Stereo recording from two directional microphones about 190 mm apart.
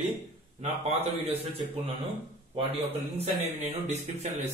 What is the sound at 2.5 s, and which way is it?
A man's voice, 30° right (ahead or behind).